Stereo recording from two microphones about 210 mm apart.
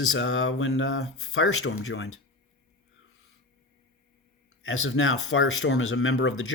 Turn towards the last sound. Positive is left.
turn(degrees=75)  # may be behind; listen again after turning